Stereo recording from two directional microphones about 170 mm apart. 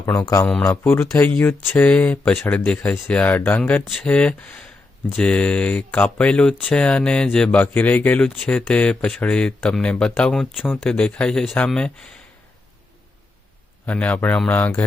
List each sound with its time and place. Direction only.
0.0 s speech: 15° left (ahead or behind)
13.8 s speech: 10° left (ahead or behind)